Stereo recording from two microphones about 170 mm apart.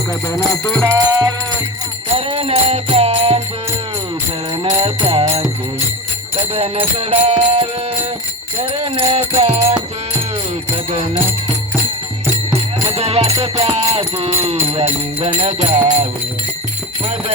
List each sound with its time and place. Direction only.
0.9 s music: 20° right (ahead or behind)
2.1 s jingle bell: 35° right (ahead or behind)
4.6 s music: 35° right (ahead or behind)
6.5 s music: 35° right (ahead or behind)
12.9 s music: 35° right (ahead or behind)